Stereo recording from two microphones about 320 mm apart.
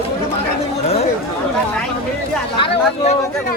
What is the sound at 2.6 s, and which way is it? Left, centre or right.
Speech, centre.